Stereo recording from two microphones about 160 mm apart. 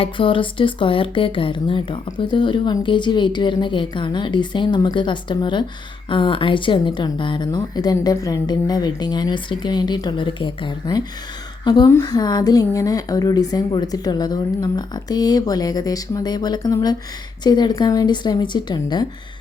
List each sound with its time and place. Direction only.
0.0 s speech: 30° left (ahead or behind)